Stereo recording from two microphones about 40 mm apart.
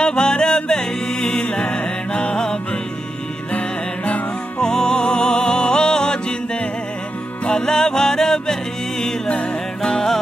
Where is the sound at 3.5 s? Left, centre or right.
Left.